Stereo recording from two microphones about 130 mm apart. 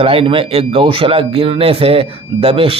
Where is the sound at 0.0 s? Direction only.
45° right (ahead or behind).